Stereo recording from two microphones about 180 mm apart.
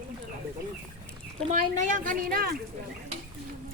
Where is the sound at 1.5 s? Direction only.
45° right (ahead or behind).